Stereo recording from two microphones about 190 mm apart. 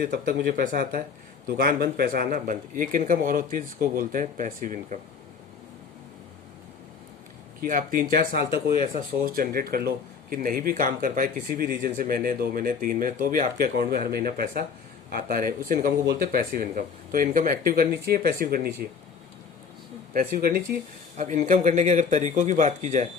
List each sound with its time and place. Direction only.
0.0 s speech: 50° right (ahead or behind)
7.6 s speech: 45° right (ahead or behind)
20.1 s speech: 50° right (ahead or behind)